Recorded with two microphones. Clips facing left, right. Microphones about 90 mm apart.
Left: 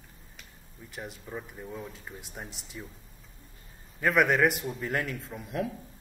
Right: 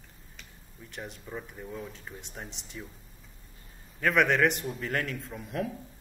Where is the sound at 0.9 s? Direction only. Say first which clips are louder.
Even; 5° left (ahead or behind).